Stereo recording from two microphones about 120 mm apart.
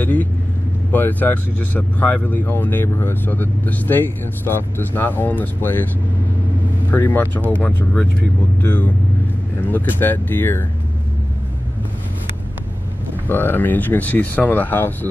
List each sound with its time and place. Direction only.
0.0 s speech: 15° left (ahead or behind)
6.9 s speech: 15° left (ahead or behind)
13.3 s speech: 15° left (ahead or behind)